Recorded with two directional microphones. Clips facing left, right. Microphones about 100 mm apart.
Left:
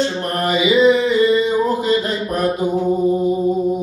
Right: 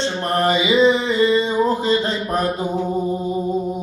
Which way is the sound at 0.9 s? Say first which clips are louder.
Left 2 dB; 30° right (ahead or behind).